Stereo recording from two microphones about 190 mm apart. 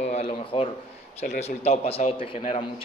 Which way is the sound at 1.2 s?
35° left (ahead or behind).